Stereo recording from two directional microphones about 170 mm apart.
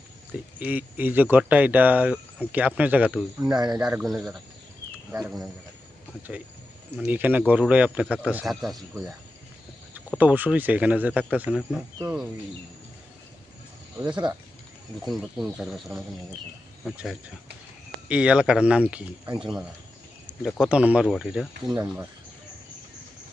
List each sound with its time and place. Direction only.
0.6 s speech: 10° right (ahead or behind)
3.4 s speech: 25° right (ahead or behind)
3.8 s speech: centre (ahead or behind)
6.9 s speech: 5° right (ahead or behind)
10.2 s speech: 10° right (ahead or behind)
15.0 s speech: centre (ahead or behind)
16.8 s speech: centre (ahead or behind)
19.2 s speech: 25° right (ahead or behind)
20.4 s speech: 5° right (ahead or behind)